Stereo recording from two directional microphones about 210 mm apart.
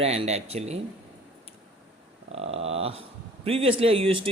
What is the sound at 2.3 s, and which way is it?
Speech, 30° right (ahead or behind).